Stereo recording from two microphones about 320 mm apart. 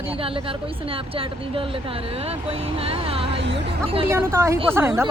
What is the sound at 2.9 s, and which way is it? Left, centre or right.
Speech, centre.